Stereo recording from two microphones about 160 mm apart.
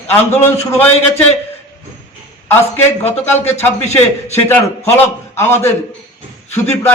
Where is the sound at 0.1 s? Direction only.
10° left (ahead or behind).